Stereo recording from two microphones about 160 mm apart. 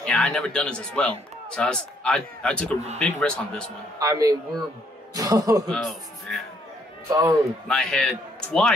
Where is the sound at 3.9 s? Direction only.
25° right (ahead or behind).